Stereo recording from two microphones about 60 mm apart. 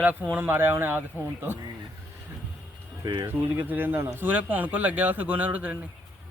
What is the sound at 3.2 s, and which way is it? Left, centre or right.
Speech, right.